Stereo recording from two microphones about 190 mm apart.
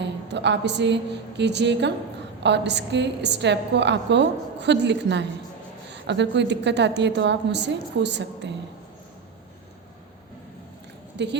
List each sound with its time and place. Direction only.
0.0 s a woman's voice: 65° right (ahead or behind)
11.2 s speech: 65° right (ahead or behind)